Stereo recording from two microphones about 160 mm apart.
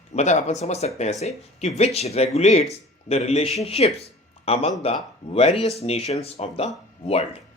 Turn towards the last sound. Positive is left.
turn(degrees=40)  # may be behind; listen again after turning